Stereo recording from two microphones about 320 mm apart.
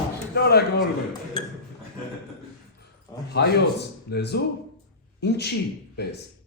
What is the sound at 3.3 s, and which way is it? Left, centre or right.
Speech, left.